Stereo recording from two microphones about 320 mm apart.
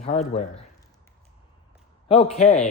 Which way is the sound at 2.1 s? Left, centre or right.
Centre.